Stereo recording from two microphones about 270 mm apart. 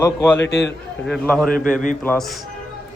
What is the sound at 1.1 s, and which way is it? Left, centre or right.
A man's voice, centre.